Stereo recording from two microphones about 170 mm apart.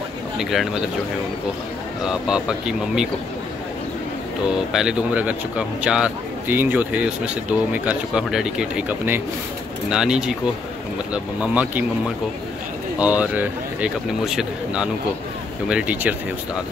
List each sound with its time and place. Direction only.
0.4 s speech: centre (ahead or behind)
2.0 s speech: 5° right (ahead or behind)
4.7 s a man's voice: 5° right (ahead or behind)
11.4 s a man's voice: 10° right (ahead or behind)
13.0 s a man's voice: 10° right (ahead or behind)